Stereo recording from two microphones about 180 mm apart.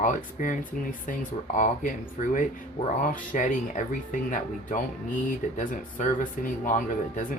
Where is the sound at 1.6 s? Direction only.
45° left (ahead or behind).